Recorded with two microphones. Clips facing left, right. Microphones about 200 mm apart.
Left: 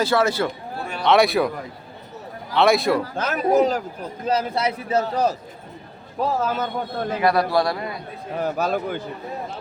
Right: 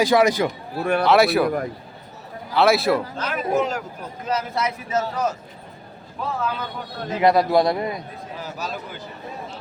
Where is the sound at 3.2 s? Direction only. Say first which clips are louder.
Left 4 dB; 45° left (ahead or behind).